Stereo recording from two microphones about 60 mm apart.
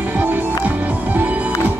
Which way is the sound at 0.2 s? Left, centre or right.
Right.